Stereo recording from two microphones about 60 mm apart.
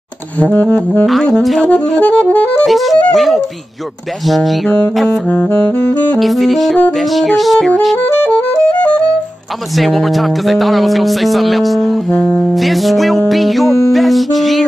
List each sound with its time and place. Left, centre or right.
0.4 s saxophone: left
1.3 s speech: centre
1.6 s saxophone: left
2.6 s speech: centre
5.3 s saxophone: left
6.1 s speech: centre
8.2 s music: left
9.8 s speech: centre
12.2 s music: centre
12.4 s speech: centre